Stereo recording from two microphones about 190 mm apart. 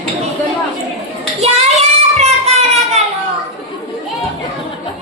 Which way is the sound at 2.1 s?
35° right (ahead or behind).